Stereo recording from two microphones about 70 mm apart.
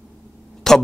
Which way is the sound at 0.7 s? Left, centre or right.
Centre.